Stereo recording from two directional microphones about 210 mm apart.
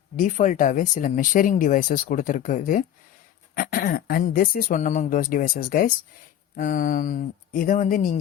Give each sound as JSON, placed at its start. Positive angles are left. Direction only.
{"t": 0.2, "sound": "speech", "side_deg": 35}